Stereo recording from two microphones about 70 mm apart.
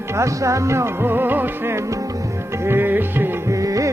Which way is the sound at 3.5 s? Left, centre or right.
Right.